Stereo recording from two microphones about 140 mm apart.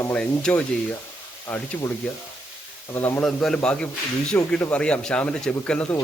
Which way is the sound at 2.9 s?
15° left (ahead or behind).